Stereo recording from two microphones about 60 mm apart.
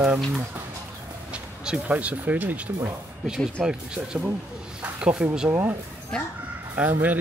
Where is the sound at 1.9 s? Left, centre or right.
Right.